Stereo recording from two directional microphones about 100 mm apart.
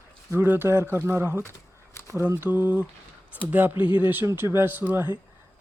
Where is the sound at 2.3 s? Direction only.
20° right (ahead or behind).